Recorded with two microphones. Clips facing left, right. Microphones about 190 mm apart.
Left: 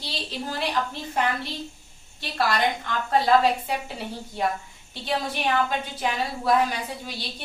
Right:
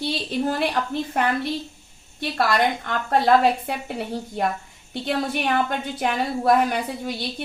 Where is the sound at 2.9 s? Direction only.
55° right (ahead or behind).